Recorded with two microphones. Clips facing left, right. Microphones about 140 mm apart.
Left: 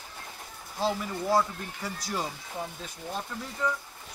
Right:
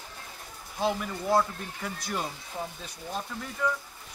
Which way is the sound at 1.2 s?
5° left (ahead or behind).